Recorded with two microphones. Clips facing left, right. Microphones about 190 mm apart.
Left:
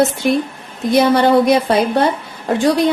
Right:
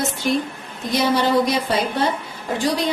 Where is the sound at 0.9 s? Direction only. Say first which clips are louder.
Left 6 dB; 60° left (ahead or behind).